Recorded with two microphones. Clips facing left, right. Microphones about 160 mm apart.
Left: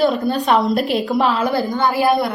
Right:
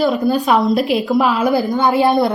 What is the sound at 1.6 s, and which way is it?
Speech, 20° right (ahead or behind).